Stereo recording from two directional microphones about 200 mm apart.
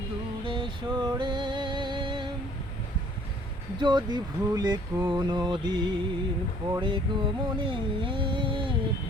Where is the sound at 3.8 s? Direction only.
20° right (ahead or behind).